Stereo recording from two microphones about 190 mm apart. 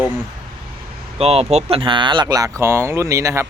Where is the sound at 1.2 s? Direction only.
35° right (ahead or behind).